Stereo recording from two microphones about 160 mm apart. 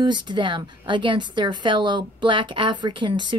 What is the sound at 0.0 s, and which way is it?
A woman's voice, 30° right (ahead or behind).